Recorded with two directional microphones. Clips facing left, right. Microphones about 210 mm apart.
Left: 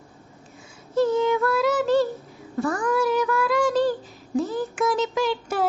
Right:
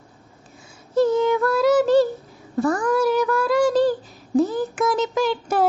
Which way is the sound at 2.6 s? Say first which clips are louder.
Right 3 dB; 35° right (ahead or behind).